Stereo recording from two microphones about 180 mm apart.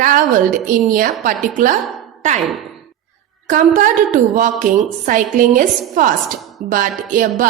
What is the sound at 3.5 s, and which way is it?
A woman's voice, 45° right (ahead or behind).